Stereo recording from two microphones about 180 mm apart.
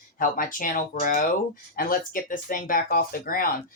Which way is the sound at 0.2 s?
50° left (ahead or behind).